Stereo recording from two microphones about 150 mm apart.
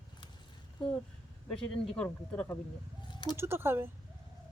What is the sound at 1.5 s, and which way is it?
Speech, 5° left (ahead or behind).